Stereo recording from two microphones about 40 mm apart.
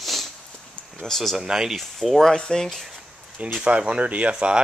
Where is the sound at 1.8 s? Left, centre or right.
Centre.